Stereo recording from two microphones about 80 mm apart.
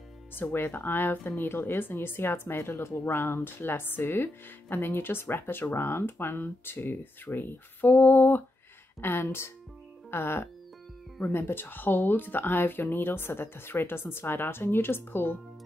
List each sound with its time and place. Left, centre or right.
0.3 s speech: left